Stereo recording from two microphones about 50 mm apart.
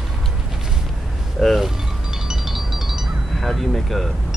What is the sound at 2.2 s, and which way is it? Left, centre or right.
Music, centre.